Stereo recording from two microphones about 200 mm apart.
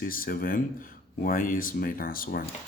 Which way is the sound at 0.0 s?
45° left (ahead or behind).